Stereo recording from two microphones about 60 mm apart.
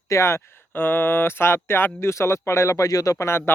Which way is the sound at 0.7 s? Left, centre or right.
Left.